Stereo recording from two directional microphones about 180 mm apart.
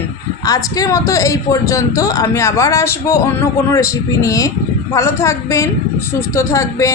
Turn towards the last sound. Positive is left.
turn(degrees=15)  # may be behind; listen again after turning